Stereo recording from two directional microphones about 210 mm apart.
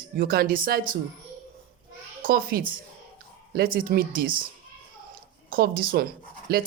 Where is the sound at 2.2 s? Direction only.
45° right (ahead or behind).